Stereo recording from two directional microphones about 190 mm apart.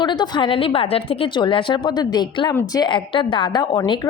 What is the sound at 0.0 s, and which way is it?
Speech, 25° left (ahead or behind).